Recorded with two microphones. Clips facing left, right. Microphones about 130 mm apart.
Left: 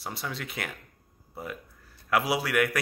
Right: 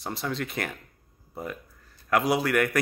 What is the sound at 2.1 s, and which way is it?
Speech, 5° left (ahead or behind).